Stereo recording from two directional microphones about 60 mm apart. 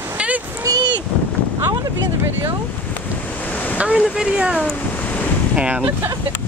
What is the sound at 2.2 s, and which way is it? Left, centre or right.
Speech, right.